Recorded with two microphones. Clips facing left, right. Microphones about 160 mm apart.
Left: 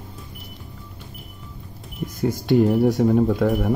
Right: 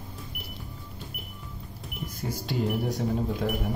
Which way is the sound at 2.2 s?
65° left (ahead or behind).